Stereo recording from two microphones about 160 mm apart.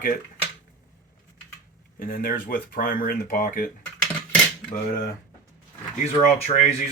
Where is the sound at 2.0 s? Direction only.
60° left (ahead or behind).